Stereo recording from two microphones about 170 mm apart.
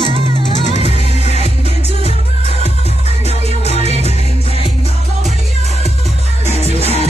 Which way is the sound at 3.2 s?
40° left (ahead or behind).